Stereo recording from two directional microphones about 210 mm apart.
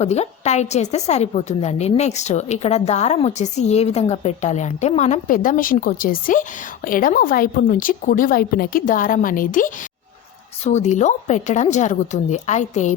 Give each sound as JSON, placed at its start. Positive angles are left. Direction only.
{"t": 0.0, "sound": "a woman's voice", "side_deg": 30}